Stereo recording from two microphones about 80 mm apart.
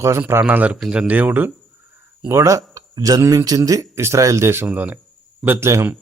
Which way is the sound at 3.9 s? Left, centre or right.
Right.